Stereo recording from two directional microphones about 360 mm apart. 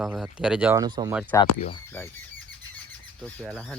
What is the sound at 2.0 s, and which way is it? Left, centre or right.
Speech, centre.